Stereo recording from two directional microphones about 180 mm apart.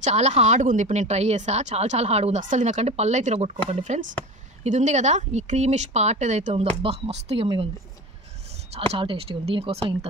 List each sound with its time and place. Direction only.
0.0 s speech: 35° right (ahead or behind)
8.7 s speech: 30° right (ahead or behind)